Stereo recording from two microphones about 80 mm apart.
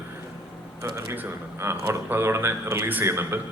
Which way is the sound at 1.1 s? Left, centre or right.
Right.